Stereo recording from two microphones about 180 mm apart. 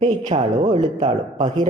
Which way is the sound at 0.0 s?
35° right (ahead or behind).